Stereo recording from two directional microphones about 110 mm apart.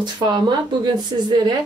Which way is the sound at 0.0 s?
40° right (ahead or behind).